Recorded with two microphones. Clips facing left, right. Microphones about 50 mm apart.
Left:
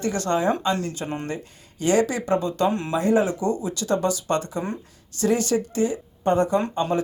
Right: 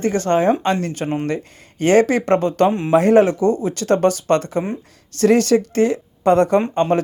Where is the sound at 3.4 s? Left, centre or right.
Right.